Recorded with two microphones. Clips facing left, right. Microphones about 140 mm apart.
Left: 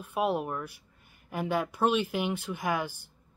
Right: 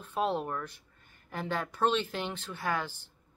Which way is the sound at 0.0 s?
10° left (ahead or behind).